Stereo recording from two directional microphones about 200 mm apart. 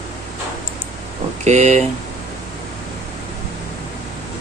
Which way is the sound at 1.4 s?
35° right (ahead or behind).